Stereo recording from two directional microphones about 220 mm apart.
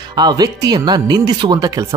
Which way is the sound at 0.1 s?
20° right (ahead or behind).